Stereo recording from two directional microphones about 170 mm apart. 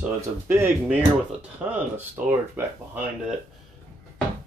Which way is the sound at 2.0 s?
10° right (ahead or behind).